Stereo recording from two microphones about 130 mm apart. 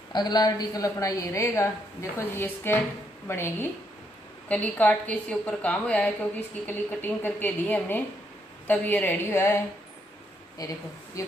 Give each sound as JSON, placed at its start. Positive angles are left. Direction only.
{"t": 0.1, "sound": "a woman's voice", "side_deg": 30}
{"t": 10.6, "sound": "a woman's voice", "side_deg": 25}